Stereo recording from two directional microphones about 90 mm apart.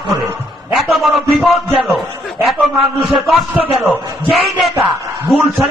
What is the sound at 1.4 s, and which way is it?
A man's voice, centre (ahead or behind).